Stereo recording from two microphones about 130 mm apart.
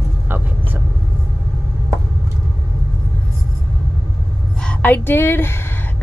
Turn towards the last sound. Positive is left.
turn(degrees=20)  # may be behind; listen again after turning